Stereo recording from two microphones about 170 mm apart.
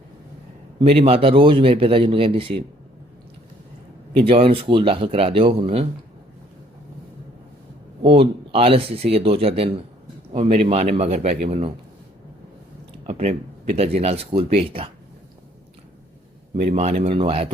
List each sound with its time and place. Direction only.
0.8 s a man's voice: 35° right (ahead or behind)
4.1 s a man's voice: 35° right (ahead or behind)
8.0 s a man's voice: 35° right (ahead or behind)
13.1 s a man's voice: 40° right (ahead or behind)
16.6 s a man's voice: 40° right (ahead or behind)